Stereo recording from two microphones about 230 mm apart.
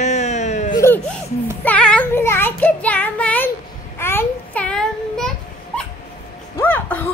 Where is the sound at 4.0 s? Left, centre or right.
Centre.